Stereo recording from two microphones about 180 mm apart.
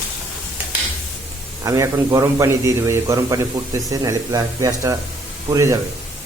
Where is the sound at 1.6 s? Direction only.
20° right (ahead or behind).